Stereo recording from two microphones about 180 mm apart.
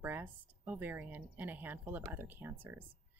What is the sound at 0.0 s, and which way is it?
Speech, 10° right (ahead or behind).